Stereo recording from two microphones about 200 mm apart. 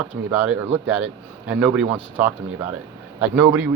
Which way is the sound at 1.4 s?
5° right (ahead or behind).